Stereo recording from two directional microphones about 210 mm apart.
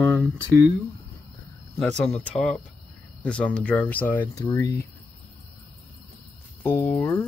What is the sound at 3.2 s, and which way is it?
Speech, 5° left (ahead or behind).